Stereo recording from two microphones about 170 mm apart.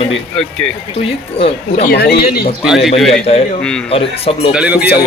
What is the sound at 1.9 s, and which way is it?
Speech, 65° left (ahead or behind).